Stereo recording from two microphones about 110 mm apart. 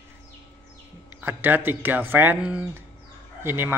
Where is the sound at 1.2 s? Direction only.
20° right (ahead or behind).